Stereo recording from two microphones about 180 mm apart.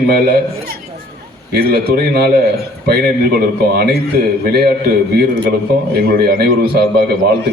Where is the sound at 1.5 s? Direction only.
60° right (ahead or behind).